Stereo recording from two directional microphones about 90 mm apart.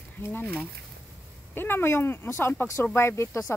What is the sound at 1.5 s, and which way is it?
Speech, 25° left (ahead or behind).